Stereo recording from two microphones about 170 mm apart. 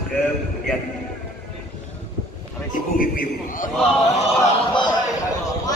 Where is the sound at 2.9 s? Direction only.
55° left (ahead or behind).